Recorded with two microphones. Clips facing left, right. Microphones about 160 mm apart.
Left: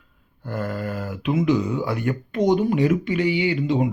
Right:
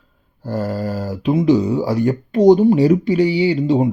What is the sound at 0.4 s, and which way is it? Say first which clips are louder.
Speech: right 6 dB; 35° right (ahead or behind).